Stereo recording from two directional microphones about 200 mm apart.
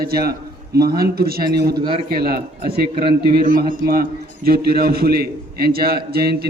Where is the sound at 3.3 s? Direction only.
45° right (ahead or behind).